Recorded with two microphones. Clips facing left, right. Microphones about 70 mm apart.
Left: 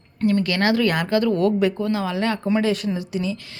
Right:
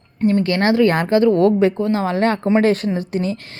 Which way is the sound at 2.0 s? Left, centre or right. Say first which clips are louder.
Right 5 dB; right.